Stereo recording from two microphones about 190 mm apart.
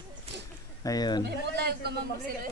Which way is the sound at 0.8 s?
20° left (ahead or behind).